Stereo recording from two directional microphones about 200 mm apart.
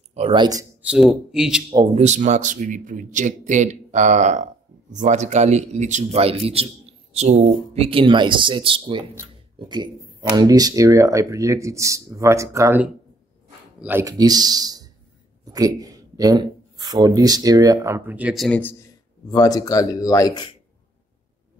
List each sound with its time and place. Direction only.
0.1 s a man's voice: 25° right (ahead or behind)
0.8 s speech: 5° right (ahead or behind)
2.0 s a man's voice: 35° right (ahead or behind); by 20.5 s 20° left (ahead or behind)